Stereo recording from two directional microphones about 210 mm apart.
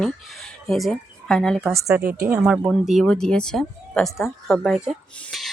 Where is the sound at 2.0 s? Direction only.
45° right (ahead or behind).